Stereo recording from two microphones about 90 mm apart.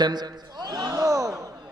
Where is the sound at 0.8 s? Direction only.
40° right (ahead or behind).